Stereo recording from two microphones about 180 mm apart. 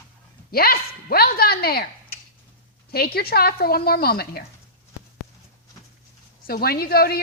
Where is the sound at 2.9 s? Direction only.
60° left (ahead or behind).